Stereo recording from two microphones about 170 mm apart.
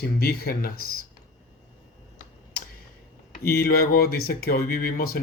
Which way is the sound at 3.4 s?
65° left (ahead or behind).